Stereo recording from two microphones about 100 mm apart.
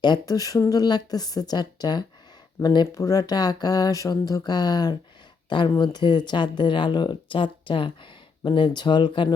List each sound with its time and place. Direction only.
0.0 s speech: 40° left (ahead or behind)